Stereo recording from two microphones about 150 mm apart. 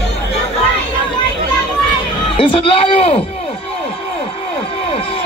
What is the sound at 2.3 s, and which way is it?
Speech, 35° left (ahead or behind).